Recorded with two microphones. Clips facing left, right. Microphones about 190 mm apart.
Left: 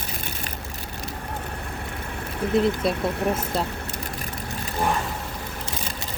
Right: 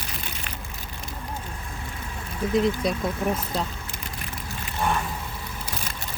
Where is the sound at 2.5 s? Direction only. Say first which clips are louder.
Left 1 dB; 5° left (ahead or behind).